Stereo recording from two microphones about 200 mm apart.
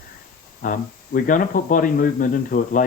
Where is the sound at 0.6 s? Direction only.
45° left (ahead or behind).